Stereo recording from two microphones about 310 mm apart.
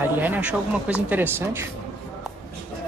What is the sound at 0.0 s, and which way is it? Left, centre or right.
A woman's voice, centre.